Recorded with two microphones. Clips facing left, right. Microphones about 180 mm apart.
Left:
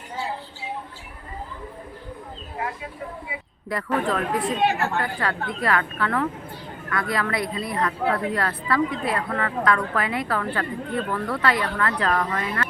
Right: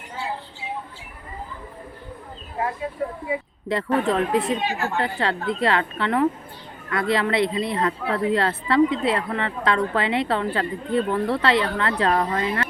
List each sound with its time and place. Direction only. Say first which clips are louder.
3.7 s a woman's voice: right 3 dB; 25° right (ahead or behind)